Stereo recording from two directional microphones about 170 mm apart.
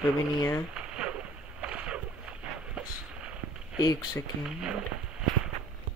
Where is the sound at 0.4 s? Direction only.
20° left (ahead or behind).